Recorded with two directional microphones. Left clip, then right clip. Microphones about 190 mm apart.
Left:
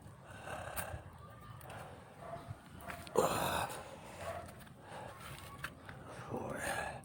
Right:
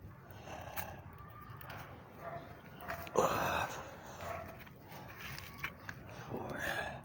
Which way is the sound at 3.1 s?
30° left (ahead or behind).